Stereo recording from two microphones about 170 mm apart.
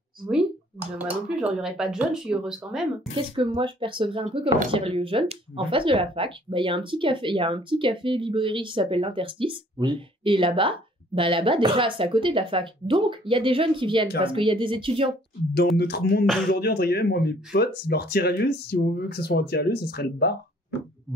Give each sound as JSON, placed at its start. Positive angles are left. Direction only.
{"t": 0.9, "sound": "speech", "side_deg": -5}
{"t": 3.2, "sound": "speech", "side_deg": -30}
{"t": 15.8, "sound": "speech", "side_deg": 75}